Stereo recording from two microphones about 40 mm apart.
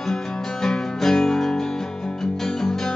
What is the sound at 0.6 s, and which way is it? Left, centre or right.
Music, centre.